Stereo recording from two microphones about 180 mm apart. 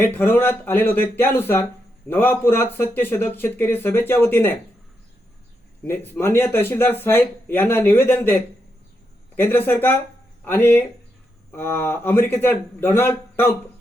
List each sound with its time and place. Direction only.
0.0 s speech: 10° left (ahead or behind)
5.8 s speech: 15° left (ahead or behind)